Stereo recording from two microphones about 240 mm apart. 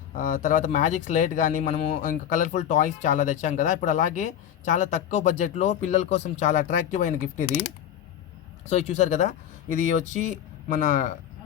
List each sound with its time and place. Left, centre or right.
0.1 s speech: left
8.7 s speech: left